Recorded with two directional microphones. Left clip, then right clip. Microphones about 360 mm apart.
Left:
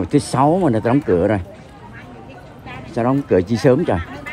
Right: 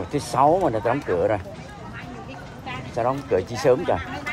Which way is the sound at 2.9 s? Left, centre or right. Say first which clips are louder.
Left 5 dB; left.